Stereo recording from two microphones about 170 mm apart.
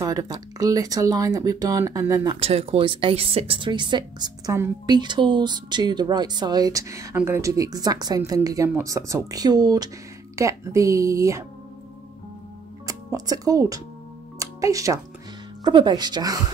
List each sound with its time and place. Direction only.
0.0 s speech: 20° right (ahead or behind)
2.4 s speech: 35° right (ahead or behind); by 11.4 s 20° right (ahead or behind)
12.8 s speech: 20° right (ahead or behind)
14.4 s music: 20° right (ahead or behind)
15.6 s speech: 25° right (ahead or behind)